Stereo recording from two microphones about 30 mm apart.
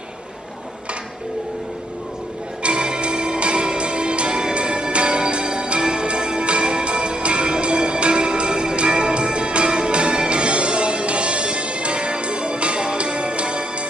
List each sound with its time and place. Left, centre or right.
2.6 s music: right